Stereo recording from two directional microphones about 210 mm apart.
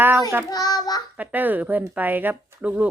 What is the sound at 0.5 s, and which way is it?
Child singing, 20° left (ahead or behind).